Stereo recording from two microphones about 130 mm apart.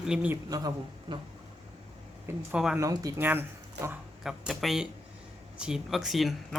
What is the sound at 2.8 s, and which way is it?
Speech, 25° right (ahead or behind).